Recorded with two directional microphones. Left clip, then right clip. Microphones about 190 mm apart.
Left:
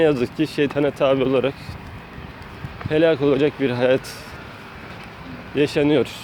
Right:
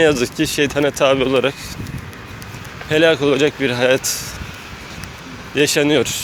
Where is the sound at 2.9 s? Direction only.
5° left (ahead or behind).